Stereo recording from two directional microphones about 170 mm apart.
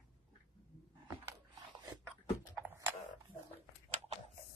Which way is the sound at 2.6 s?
15° right (ahead or behind).